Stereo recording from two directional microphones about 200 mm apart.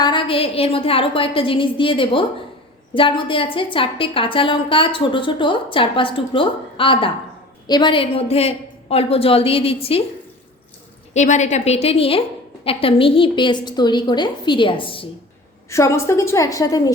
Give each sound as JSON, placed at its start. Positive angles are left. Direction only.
{"t": 0.0, "sound": "a woman's voice", "side_deg": 25}
{"t": 11.1, "sound": "a woman's voice", "side_deg": 35}
{"t": 15.7, "sound": "a woman's voice", "side_deg": 15}